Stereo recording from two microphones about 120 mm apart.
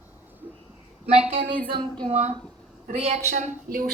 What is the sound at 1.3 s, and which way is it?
Speech, 50° right (ahead or behind).